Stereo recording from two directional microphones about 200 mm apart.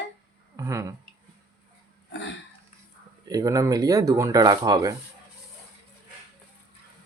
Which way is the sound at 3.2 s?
15° right (ahead or behind).